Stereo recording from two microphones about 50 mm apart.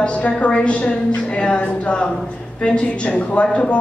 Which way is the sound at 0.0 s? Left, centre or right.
Left.